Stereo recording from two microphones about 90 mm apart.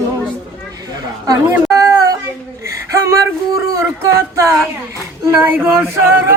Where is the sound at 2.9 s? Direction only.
35° right (ahead or behind).